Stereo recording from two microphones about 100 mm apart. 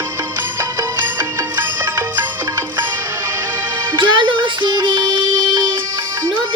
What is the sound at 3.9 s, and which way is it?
Music, 50° right (ahead or behind).